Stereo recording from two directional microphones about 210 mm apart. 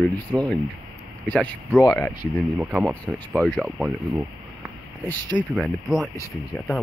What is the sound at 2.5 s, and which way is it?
Speech, 5° right (ahead or behind).